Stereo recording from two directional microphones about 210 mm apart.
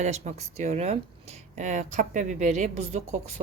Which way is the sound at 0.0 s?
35° right (ahead or behind).